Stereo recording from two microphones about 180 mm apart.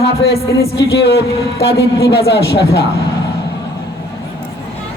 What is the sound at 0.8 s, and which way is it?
A man's voice, 75° left (ahead or behind).